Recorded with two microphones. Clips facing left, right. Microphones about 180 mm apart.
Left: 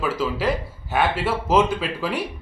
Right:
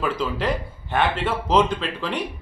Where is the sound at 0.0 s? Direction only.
5° left (ahead or behind).